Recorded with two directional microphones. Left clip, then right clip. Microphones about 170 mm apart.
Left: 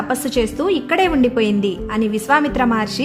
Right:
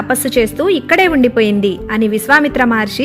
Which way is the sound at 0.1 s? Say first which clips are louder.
Right 7 dB; 20° right (ahead or behind).